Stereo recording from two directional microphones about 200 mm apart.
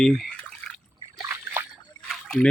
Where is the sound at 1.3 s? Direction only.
10° right (ahead or behind).